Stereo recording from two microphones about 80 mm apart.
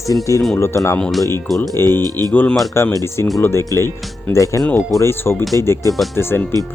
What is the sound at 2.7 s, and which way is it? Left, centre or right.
Speech, left.